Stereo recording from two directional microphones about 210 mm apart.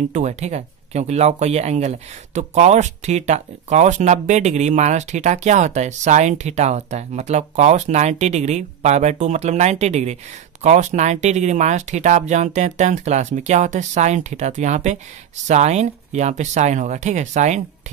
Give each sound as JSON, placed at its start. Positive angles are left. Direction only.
{"t": 0.1, "sound": "speech", "side_deg": -35}